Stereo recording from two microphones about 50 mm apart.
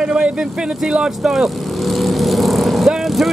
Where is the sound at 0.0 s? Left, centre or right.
Centre.